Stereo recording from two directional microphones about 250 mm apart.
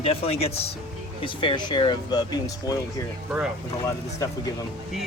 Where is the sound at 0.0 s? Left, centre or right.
Left.